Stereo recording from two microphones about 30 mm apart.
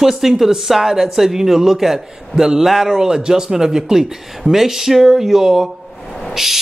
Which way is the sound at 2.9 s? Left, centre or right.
Centre.